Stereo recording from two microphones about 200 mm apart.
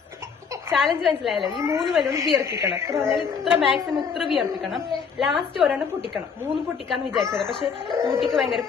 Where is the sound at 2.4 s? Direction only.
15° right (ahead or behind).